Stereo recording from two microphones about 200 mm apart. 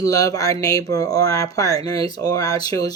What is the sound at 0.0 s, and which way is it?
Speech, 15° left (ahead or behind).